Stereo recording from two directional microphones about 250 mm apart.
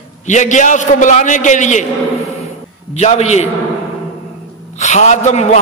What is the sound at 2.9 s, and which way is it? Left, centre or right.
Speech, left.